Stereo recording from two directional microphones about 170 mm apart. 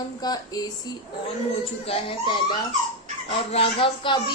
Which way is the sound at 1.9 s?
30° left (ahead or behind).